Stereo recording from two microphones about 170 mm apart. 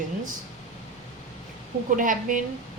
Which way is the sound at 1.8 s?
50° right (ahead or behind).